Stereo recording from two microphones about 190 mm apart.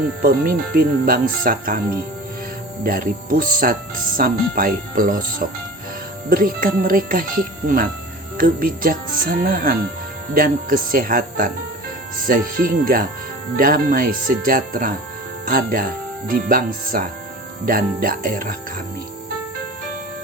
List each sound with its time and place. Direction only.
0.2 s speech: 50° right (ahead or behind)
2.8 s speech: 50° right (ahead or behind)
8.4 s speech: 50° right (ahead or behind)